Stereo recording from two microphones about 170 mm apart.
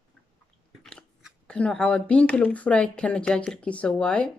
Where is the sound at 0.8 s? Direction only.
5° left (ahead or behind).